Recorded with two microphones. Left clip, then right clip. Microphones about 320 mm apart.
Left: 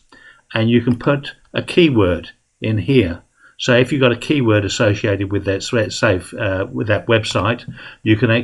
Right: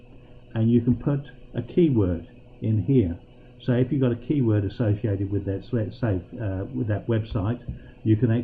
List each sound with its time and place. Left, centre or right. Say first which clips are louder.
0.5 s speech: left 7 dB; centre